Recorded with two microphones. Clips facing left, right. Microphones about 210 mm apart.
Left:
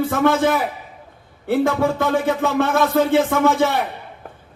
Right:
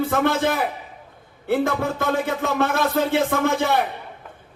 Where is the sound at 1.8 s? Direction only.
55° left (ahead or behind).